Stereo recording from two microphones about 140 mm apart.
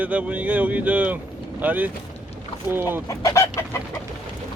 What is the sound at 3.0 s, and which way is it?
Chicken, 25° left (ahead or behind).